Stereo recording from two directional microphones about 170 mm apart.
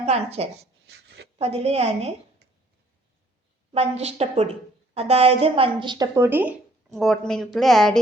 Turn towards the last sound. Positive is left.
turn(degrees=0)  # may be behind; listen again after turning